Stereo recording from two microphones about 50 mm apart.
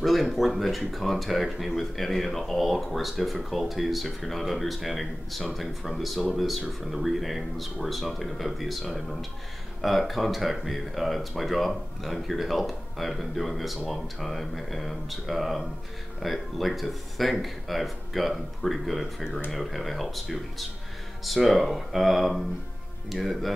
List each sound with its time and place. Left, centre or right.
0.0 s speech: centre